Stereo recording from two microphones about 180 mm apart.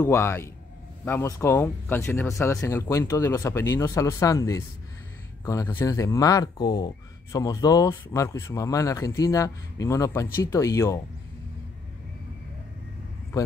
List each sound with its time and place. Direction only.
0.0 s speech: 15° left (ahead or behind)